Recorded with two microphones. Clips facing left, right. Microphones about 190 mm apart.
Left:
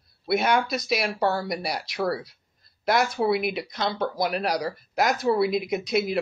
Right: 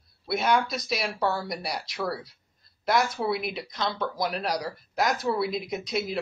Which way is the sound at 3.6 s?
55° left (ahead or behind).